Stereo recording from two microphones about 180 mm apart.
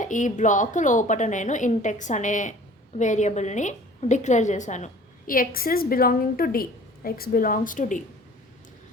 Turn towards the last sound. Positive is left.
turn(degrees=45)  # may be behind; listen again after turning